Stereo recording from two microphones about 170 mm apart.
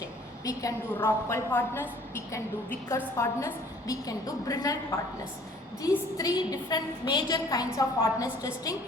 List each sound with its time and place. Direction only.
0.0 s a woman's voice: 20° left (ahead or behind)